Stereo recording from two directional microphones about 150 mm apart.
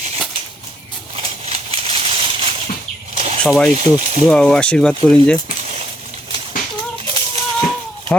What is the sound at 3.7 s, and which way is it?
Speech, 50° right (ahead or behind).